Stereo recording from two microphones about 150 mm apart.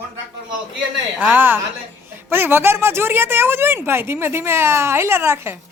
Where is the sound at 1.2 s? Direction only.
15° right (ahead or behind).